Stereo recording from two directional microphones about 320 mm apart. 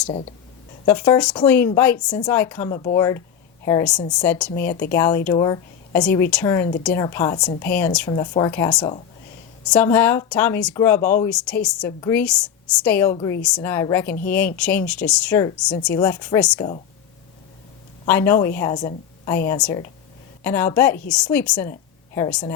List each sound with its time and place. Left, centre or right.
0.1 s speech: centre
18.0 s a woman's voice: centre